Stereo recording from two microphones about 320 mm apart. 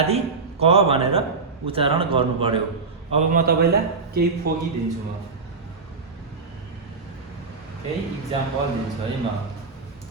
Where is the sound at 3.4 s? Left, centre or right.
Right.